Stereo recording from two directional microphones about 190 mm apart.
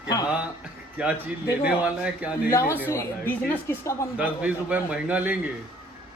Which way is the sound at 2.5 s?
15° left (ahead or behind).